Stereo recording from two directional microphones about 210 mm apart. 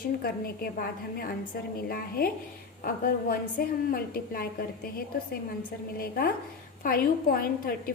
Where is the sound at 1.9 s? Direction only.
45° left (ahead or behind).